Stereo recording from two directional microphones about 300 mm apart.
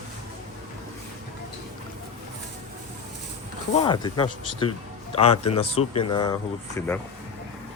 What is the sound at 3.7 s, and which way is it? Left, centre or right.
Speech, centre.